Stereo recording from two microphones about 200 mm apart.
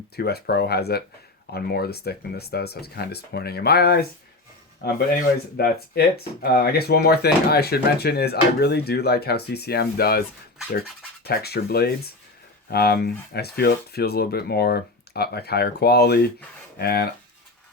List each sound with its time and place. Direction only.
0.2 s speech: 50° left (ahead or behind)